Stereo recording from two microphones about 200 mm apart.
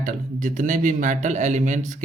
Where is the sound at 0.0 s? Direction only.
40° right (ahead or behind).